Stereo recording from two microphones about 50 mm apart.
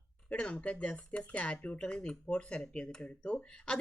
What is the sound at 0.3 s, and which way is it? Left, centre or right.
Speech, left.